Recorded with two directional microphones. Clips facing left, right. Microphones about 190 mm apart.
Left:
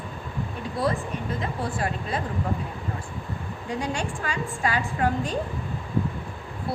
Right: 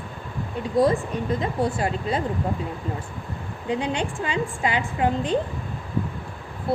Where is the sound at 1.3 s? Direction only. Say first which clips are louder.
Right 5 dB; 25° right (ahead or behind).